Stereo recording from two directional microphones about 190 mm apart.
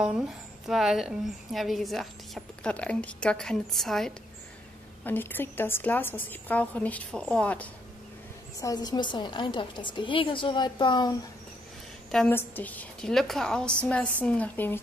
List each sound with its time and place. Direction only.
0.0 s a woman's voice: 5° right (ahead or behind)
8.5 s a woman's voice: 20° left (ahead or behind)
12.1 s a woman's voice: 5° left (ahead or behind)